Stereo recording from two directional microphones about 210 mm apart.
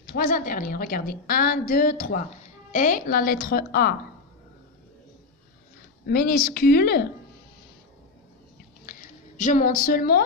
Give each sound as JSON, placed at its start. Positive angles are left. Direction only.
{"t": 0.1, "sound": "a woman's voice", "side_deg": 45}
{"t": 6.0, "sound": "a woman's voice", "side_deg": 45}
{"t": 9.0, "sound": "a woman's voice", "side_deg": 40}